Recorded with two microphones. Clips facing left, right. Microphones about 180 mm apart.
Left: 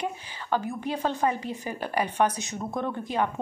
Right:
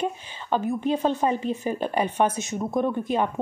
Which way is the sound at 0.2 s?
20° right (ahead or behind).